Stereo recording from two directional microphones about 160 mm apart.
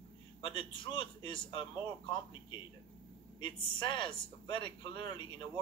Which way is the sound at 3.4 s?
30° left (ahead or behind).